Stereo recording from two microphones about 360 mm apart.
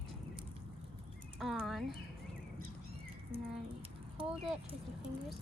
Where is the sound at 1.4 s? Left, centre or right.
Centre.